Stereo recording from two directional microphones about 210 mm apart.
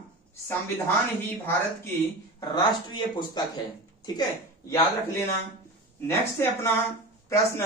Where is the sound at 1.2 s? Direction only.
10° left (ahead or behind).